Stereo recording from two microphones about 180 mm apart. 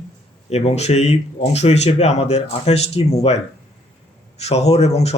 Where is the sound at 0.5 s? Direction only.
35° left (ahead or behind).